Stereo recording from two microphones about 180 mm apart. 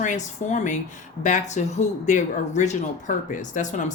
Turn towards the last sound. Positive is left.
turn(degrees=45)  # may be behind; listen again after turning